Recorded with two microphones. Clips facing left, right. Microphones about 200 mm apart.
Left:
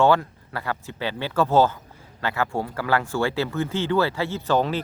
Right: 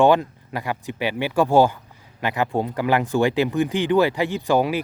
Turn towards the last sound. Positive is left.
turn(degrees=-10)  # may be behind; listen again after turning